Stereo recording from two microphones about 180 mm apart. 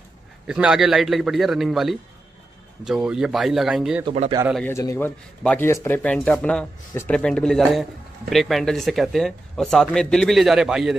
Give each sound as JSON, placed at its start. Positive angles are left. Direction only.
{"t": 0.5, "sound": "speech", "side_deg": -5}
{"t": 4.0, "sound": "speech", "side_deg": -35}
{"t": 4.6, "sound": "speech", "side_deg": 15}